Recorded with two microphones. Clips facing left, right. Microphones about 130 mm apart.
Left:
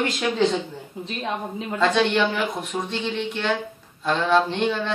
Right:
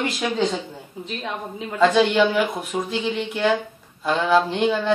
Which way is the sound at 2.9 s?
5° right (ahead or behind).